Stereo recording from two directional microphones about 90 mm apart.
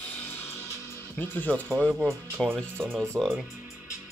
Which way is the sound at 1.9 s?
10° right (ahead or behind).